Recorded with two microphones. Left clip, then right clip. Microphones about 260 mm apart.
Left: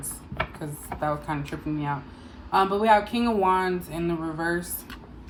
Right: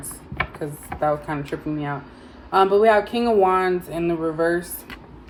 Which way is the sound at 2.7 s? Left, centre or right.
Centre.